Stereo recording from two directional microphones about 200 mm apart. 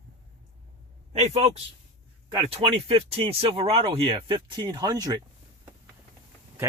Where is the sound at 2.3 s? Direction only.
25° right (ahead or behind).